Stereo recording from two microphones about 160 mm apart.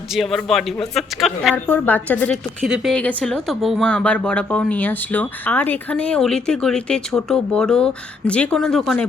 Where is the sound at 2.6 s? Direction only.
Centre (ahead or behind).